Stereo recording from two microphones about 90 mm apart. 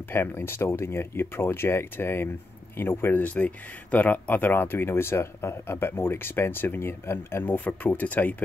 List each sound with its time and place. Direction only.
0.1 s speech: 25° left (ahead or behind)